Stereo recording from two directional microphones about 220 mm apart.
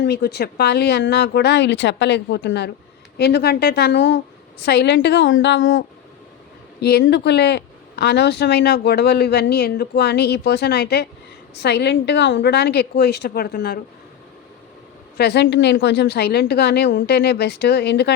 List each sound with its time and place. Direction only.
0.0 s speech: 50° left (ahead or behind)
6.8 s speech: 50° left (ahead or behind)
15.2 s speech: 50° left (ahead or behind)